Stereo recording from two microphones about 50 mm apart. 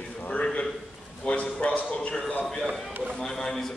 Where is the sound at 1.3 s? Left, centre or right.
Left.